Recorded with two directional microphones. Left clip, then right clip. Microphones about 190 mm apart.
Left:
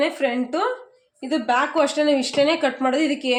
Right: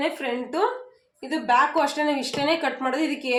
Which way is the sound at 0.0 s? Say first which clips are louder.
Left 5 dB; 50° left (ahead or behind).